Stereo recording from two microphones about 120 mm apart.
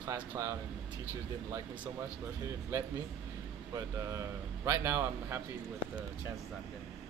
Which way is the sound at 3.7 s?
25° right (ahead or behind).